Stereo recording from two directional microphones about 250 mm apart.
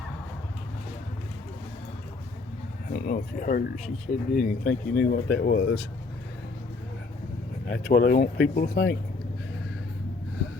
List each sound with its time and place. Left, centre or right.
2.9 s speech: left
7.7 s speech: left